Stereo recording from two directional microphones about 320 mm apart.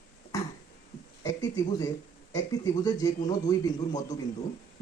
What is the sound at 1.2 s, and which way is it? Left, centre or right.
A man's voice, centre.